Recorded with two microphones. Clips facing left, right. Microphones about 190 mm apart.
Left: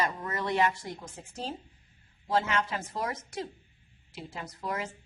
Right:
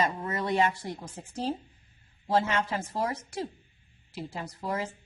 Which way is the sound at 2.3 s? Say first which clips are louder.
Right 2 dB; 30° right (ahead or behind).